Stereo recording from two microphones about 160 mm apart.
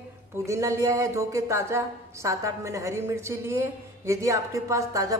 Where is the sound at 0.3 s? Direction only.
15° right (ahead or behind).